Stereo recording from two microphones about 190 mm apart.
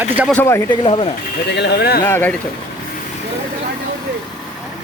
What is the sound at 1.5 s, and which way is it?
Speech, 60° left (ahead or behind).